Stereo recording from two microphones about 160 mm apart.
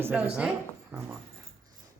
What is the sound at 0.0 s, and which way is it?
Speech, 10° right (ahead or behind).